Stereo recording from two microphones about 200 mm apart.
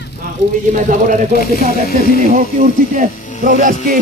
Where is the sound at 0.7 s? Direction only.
40° right (ahead or behind).